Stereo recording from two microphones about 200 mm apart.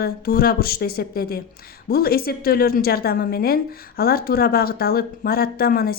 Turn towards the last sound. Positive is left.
turn(degrees=50)  # may be behind; listen again after turning